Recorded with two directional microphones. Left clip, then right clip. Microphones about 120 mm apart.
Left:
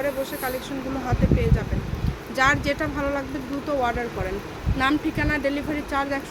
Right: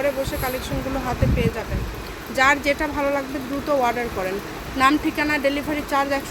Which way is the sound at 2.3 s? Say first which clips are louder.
Right 3 dB; 10° right (ahead or behind).